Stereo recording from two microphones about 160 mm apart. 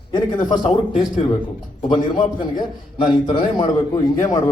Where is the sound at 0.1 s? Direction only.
30° left (ahead or behind).